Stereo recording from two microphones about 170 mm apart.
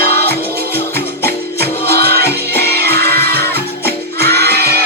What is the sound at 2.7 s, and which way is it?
Music, 70° right (ahead or behind).